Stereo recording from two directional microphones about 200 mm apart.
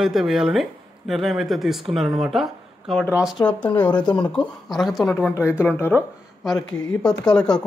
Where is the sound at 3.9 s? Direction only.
20° left (ahead or behind).